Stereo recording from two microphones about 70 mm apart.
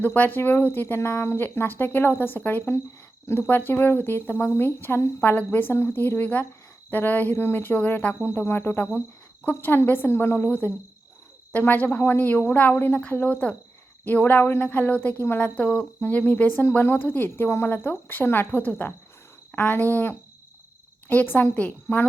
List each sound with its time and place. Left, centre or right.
0.0 s speech: left